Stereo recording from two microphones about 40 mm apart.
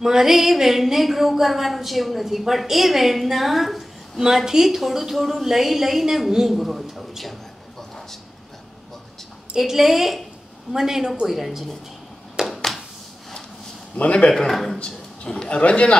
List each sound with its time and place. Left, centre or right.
0.0 s a woman's voice: centre
9.6 s a woman's voice: centre
12.4 s a sound: centre
13.9 s speech: left
14.5 s a woman's voice: centre
14.8 s a man's voice: centre